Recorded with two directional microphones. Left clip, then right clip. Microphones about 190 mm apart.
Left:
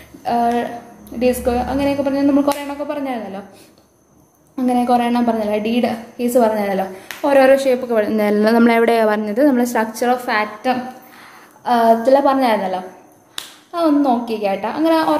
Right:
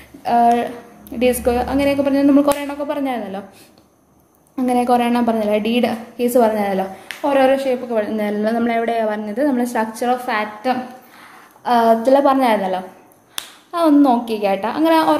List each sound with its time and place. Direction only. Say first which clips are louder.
0.2 s a woman's voice: right 3 dB; 20° right (ahead or behind)
4.6 s a woman's voice: even; 20° right (ahead or behind)
7.2 s a woman's voice: left 3 dB; 10° left (ahead or behind)
11.6 s a woman's voice: left 1 dB; 15° right (ahead or behind)